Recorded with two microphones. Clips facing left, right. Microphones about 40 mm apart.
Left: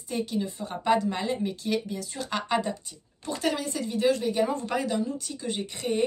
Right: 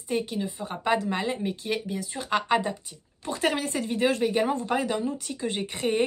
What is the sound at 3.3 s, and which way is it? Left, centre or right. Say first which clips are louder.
Speech: right 2 dB; right.